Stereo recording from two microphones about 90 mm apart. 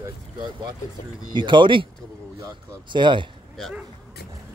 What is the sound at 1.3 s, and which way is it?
Speech, 60° right (ahead or behind).